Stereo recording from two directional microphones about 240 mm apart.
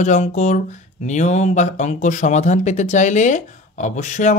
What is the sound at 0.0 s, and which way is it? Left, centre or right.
Speech, left.